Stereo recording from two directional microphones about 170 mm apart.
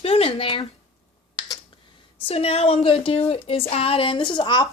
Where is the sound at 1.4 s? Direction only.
25° left (ahead or behind).